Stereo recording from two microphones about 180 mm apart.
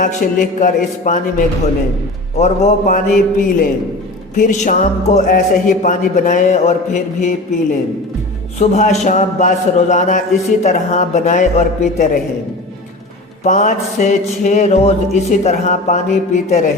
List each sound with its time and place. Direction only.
0.0 s a man's voice: 45° left (ahead or behind)
4.4 s a man's voice: 45° left (ahead or behind)
8.5 s a man's voice: 40° left (ahead or behind)
13.4 s a man's voice: 45° left (ahead or behind)